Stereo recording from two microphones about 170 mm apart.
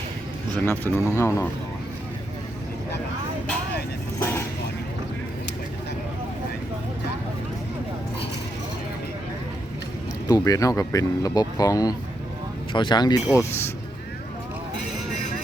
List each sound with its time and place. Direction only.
0.6 s speech: 10° left (ahead or behind)
4.2 s a sound: 15° left (ahead or behind)
10.2 s speech: 20° left (ahead or behind)